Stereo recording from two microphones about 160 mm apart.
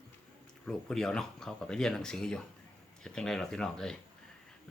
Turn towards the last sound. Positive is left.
turn(degrees=5)  # may be behind; listen again after turning